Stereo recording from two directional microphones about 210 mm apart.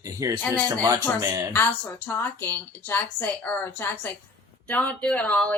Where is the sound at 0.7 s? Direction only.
15° right (ahead or behind).